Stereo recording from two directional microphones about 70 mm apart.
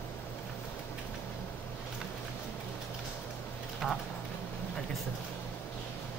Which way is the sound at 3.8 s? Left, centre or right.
Centre.